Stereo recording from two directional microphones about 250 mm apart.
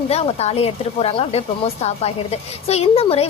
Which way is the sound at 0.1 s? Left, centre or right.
Left.